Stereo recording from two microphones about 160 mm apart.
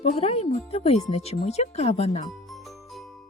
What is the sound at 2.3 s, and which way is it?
Jingle, centre (ahead or behind).